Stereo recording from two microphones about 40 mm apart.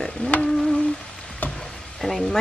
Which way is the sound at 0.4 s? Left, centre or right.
Centre.